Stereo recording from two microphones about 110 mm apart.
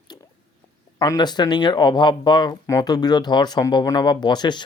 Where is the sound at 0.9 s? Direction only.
35° left (ahead or behind).